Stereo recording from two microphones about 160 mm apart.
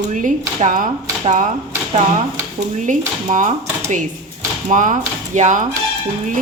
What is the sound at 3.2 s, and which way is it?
Speech, 50° right (ahead or behind).